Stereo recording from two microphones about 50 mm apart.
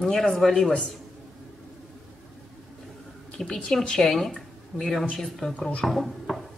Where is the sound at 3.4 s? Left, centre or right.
Centre.